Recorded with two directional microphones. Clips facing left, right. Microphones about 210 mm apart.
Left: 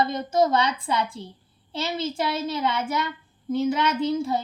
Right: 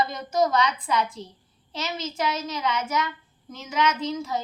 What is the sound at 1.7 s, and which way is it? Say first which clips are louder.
A child's voice: left 4 dB; 30° left (ahead or behind).